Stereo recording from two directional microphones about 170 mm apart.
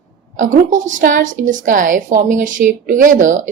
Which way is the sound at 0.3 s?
50° right (ahead or behind).